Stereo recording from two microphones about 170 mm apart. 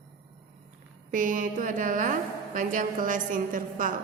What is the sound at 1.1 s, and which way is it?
A woman's voice, 50° right (ahead or behind).